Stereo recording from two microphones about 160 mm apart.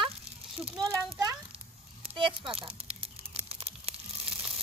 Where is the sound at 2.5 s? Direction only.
35° right (ahead or behind).